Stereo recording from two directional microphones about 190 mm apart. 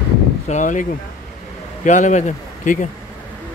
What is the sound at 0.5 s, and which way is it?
Speech, 40° left (ahead or behind).